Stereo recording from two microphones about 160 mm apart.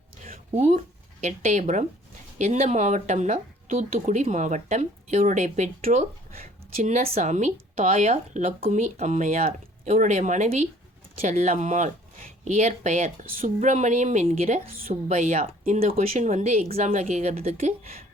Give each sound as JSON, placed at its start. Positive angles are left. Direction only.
{"t": 0.5, "sound": "speech", "side_deg": -50}